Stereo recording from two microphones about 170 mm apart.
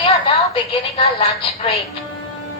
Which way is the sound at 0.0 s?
30° left (ahead or behind).